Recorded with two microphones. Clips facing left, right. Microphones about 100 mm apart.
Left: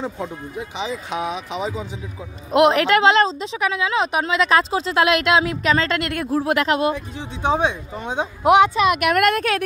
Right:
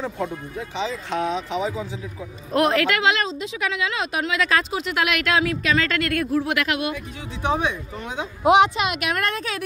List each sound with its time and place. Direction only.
0.0 s a woman's voice: 15° left (ahead or behind)
9.1 s a woman's voice: 65° left (ahead or behind)